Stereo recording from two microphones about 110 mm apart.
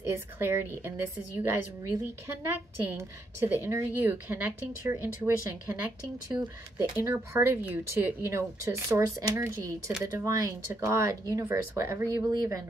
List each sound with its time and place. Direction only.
0.4 s speech: 20° right (ahead or behind)